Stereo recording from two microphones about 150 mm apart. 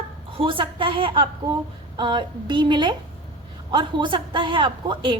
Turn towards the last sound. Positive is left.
turn(degrees=-35)  # may be behind; listen again after turning